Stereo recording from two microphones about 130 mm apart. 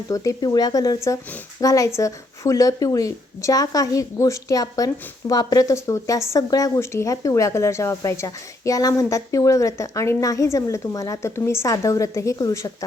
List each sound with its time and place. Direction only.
0.1 s speech: 30° left (ahead or behind)